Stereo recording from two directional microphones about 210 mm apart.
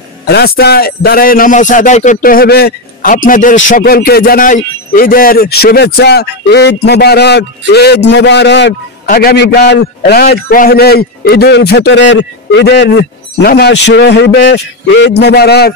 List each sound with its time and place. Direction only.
0.2 s a man's voice: 50° left (ahead or behind)
9.0 s a man's voice: 45° left (ahead or behind)